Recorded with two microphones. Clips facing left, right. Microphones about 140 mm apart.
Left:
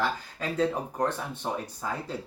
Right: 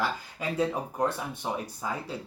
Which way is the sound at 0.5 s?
10° right (ahead or behind).